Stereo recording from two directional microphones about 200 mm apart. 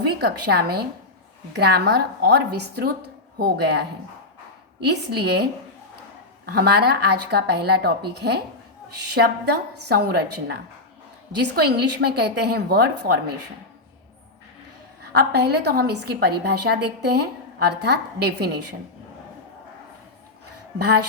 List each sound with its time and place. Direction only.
0.2 s a woman's voice: 55° right (ahead or behind)
4.9 s a woman's voice: 55° right (ahead or behind)
15.1 s a woman's voice: 55° right (ahead or behind)
20.7 s a woman's voice: 55° right (ahead or behind)